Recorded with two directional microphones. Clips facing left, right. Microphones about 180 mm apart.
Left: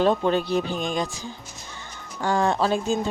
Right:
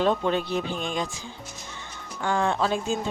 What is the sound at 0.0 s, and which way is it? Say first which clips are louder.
Speech: left 3 dB; 40° left (ahead or behind).